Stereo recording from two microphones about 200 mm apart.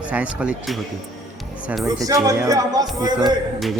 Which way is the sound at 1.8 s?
15° right (ahead or behind).